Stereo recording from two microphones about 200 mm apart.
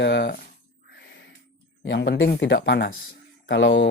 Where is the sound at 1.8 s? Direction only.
60° left (ahead or behind).